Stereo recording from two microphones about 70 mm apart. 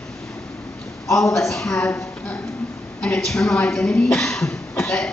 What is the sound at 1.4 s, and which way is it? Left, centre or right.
Speech, centre.